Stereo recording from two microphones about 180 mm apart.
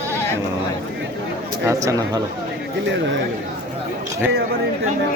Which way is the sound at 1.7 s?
20° right (ahead or behind).